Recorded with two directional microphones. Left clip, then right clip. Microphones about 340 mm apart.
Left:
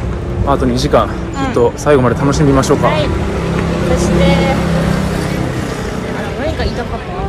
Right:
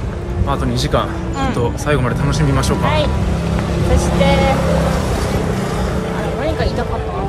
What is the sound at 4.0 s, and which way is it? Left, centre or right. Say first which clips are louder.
Speech: even; centre.